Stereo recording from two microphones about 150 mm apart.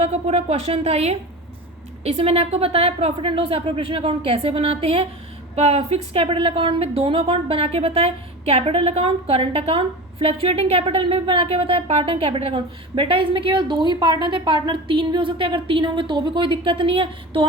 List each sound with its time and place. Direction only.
0.0 s a woman's voice: 45° right (ahead or behind)